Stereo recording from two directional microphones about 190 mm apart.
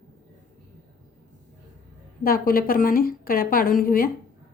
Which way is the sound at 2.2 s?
50° left (ahead or behind).